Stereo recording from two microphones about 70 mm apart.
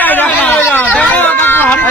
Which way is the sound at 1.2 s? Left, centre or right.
Left.